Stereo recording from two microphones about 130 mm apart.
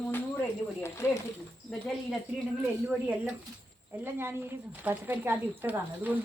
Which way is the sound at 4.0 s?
15° right (ahead or behind).